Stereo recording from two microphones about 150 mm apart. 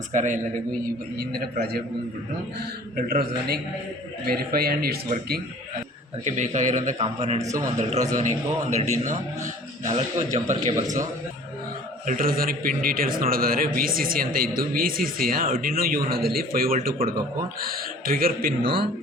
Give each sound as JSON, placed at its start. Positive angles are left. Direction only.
{"t": 0.1, "sound": "a man's voice", "side_deg": -55}
{"t": 0.9, "sound": "speech", "side_deg": -90}
{"t": 2.9, "sound": "a man's voice", "side_deg": -85}
{"t": 6.2, "sound": "a man's voice", "side_deg": -50}
{"t": 12.0, "sound": "a man's voice", "side_deg": -70}
{"t": 18.6, "sound": "a man's voice", "side_deg": -35}